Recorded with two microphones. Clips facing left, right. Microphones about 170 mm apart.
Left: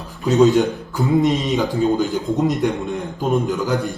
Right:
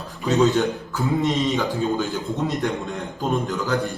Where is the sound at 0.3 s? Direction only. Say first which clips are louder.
Left 5 dB; 15° left (ahead or behind).